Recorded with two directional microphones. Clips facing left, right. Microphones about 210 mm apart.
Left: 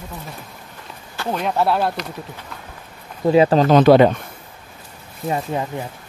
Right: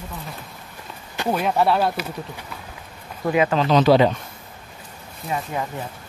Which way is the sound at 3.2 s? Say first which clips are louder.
Left 6 dB; 30° left (ahead or behind).